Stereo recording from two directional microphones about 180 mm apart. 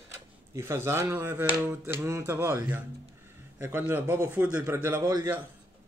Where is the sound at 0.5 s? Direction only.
15° right (ahead or behind).